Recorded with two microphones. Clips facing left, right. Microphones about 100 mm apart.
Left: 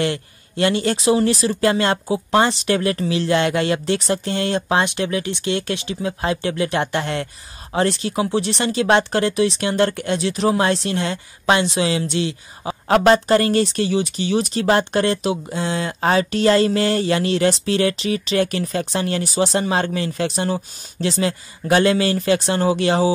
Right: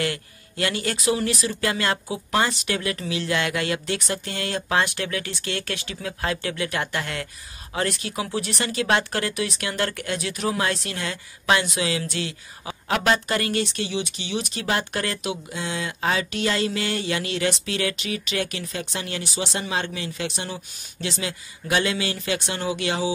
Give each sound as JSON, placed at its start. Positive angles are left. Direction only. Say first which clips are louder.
{"t": 0.0, "sound": "speech", "louder": "left 5 dB", "side_deg": 25}
{"t": 12.8, "sound": "speech", "louder": "left 8 dB", "side_deg": 35}